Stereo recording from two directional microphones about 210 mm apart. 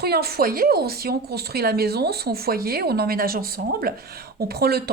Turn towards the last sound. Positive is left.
turn(degrees=-50)  # may be behind; listen again after turning